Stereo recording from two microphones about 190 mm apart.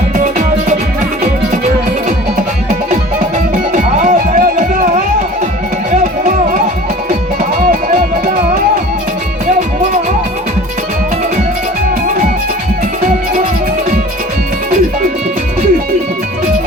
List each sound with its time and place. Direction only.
0.2 s music: 40° right (ahead or behind)
3.7 s music: 45° right (ahead or behind)